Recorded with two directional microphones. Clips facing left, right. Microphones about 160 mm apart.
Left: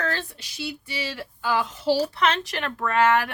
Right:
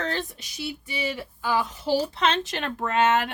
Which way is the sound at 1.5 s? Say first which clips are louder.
Left 1 dB; 15° right (ahead or behind).